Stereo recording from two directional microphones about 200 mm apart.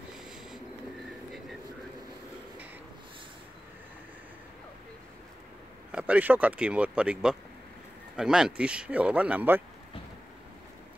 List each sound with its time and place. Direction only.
5.9 s speech: 5° right (ahead or behind)